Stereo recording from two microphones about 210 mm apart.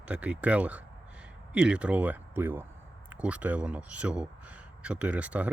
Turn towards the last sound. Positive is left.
turn(degrees=-5)  # may be behind; listen again after turning